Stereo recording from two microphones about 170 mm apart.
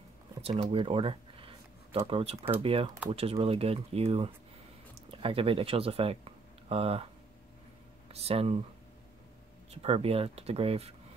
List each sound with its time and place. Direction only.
0.4 s a sound: 35° right (ahead or behind)
2.0 s speech: 35° right (ahead or behind)
8.1 s speech: 35° right (ahead or behind)
9.7 s speech: 35° right (ahead or behind)